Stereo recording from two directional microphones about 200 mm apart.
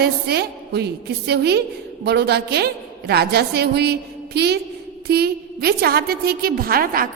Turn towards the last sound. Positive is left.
turn(degrees=-45)  # may be behind; listen again after turning